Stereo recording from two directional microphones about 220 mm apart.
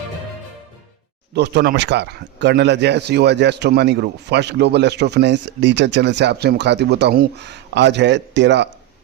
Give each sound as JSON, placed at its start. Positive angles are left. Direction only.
{"t": 1.3, "sound": "speech", "side_deg": -50}